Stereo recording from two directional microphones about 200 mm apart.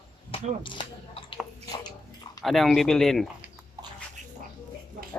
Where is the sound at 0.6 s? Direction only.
25° left (ahead or behind).